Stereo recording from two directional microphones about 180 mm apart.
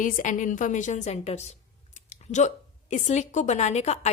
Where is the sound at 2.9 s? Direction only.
40° left (ahead or behind).